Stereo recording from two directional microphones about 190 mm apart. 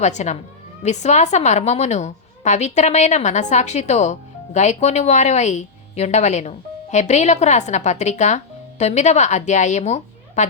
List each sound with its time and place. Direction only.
0.0 s a woman's voice: 40° left (ahead or behind)